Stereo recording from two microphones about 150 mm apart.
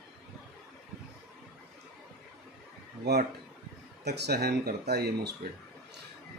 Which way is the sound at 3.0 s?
90° right.